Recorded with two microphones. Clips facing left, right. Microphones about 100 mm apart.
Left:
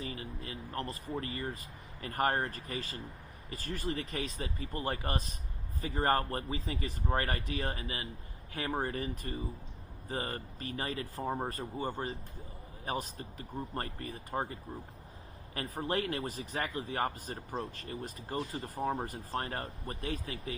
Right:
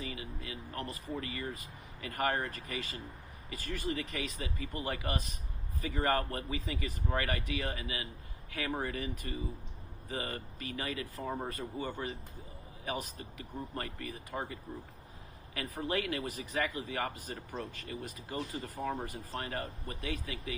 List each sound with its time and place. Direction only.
0.0 s speech: 35° left (ahead or behind)